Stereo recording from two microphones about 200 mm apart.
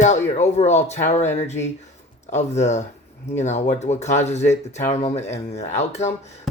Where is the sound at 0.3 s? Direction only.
35° left (ahead or behind).